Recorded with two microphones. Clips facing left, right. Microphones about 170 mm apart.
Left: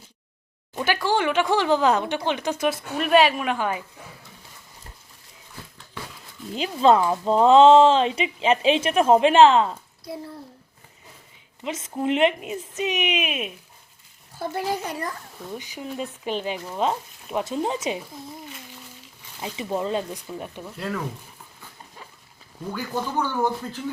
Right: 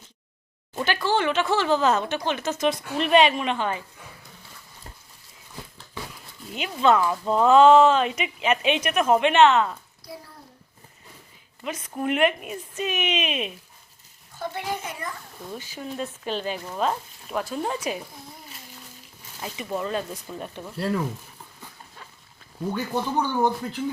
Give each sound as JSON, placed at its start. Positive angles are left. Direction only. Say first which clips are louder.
{"t": 0.8, "sound": "speech", "louder": "left 1 dB", "side_deg": 10}
{"t": 6.5, "sound": "speech", "louder": "left 3 dB", "side_deg": 30}
{"t": 11.6, "sound": "speech", "louder": "left 2 dB", "side_deg": 20}
{"t": 14.3, "sound": "a child's voice", "louder": "left 3 dB", "side_deg": 40}
{"t": 15.5, "sound": "speech", "louder": "left 1 dB", "side_deg": 15}
{"t": 19.4, "sound": "speech", "louder": "left 2 dB", "side_deg": 20}
{"t": 20.3, "sound": "speech", "louder": "even", "side_deg": 5}
{"t": 20.7, "sound": "speech", "louder": "right 4 dB", "side_deg": -30}
{"t": 22.7, "sound": "speech", "louder": "right 1 dB", "side_deg": -20}